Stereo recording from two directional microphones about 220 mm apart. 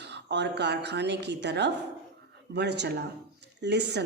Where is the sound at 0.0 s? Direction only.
50° right (ahead or behind).